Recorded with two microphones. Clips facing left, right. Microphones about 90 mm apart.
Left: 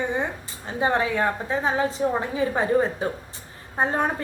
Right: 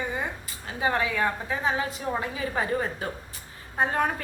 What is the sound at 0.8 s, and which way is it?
A woman's voice, 30° left (ahead or behind).